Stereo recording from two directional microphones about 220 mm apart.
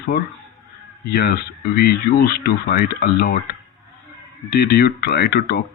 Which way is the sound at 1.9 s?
45° left (ahead or behind).